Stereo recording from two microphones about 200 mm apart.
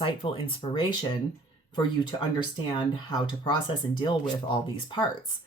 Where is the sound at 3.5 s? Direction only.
25° left (ahead or behind).